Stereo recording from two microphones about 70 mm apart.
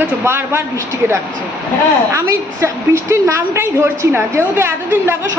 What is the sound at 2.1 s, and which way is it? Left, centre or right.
A woman's voice, right.